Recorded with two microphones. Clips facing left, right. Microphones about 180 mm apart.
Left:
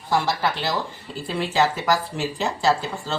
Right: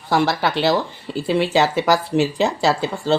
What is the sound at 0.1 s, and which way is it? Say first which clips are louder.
Speech: right 4 dB; 75° right (ahead or behind).